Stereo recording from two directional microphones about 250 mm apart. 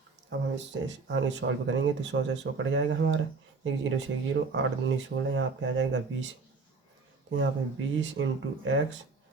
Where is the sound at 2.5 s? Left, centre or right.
Right.